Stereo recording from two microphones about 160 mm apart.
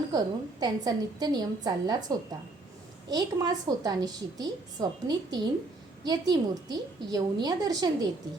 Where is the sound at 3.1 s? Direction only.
25° right (ahead or behind).